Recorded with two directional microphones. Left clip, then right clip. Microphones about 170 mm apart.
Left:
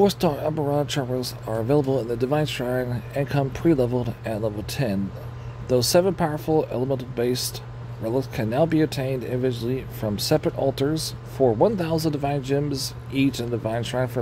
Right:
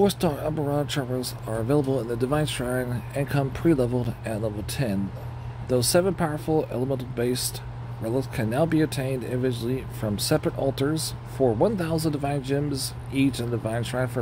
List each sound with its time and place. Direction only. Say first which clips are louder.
0.0 s speech: left 3 dB; 15° left (ahead or behind)